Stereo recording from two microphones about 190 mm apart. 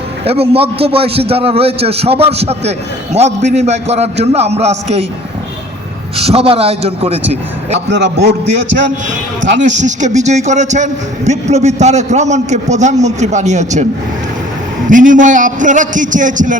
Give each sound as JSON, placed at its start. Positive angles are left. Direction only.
{"t": 0.3, "sound": "a man's voice", "side_deg": -30}
{"t": 6.1, "sound": "a man's voice", "side_deg": -30}
{"t": 7.9, "sound": "a man's voice", "side_deg": -65}
{"t": 9.7, "sound": "a man's voice", "side_deg": -40}
{"t": 14.8, "sound": "a man's voice", "side_deg": -45}